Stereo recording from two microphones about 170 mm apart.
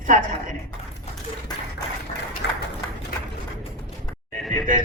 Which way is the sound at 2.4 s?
90° left.